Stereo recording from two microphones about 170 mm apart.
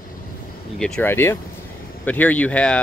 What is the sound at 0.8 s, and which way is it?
Speech, 5° left (ahead or behind).